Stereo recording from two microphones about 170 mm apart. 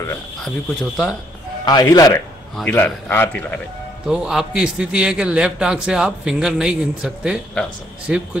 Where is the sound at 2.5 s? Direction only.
10° left (ahead or behind).